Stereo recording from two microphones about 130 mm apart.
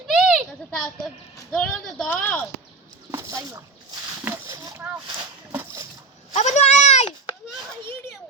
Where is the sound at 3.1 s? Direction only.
25° right (ahead or behind).